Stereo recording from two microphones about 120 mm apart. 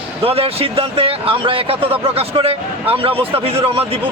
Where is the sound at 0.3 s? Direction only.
55° right (ahead or behind).